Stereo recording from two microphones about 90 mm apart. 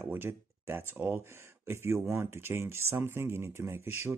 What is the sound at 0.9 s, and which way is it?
Speech, 25° right (ahead or behind).